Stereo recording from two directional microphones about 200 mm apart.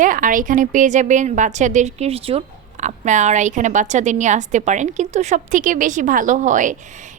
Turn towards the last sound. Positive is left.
turn(degrees=-40)  # may be behind; listen again after turning